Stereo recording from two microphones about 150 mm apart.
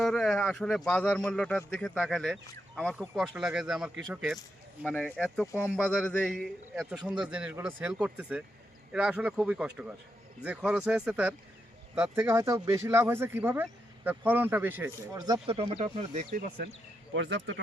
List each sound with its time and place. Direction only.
0.0 s speech: 5° left (ahead or behind); by 15.2 s 15° right (ahead or behind)
15.2 s speech: 25° right (ahead or behind)
15.5 s speech: 40° right (ahead or behind)
16.3 s speech: 70° right (ahead or behind)